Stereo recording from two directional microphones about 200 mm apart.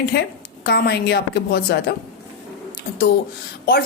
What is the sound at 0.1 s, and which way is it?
A woman's voice, 55° left (ahead or behind).